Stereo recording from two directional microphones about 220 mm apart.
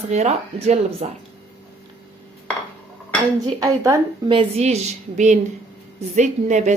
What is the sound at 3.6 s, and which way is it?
Speech, 15° right (ahead or behind).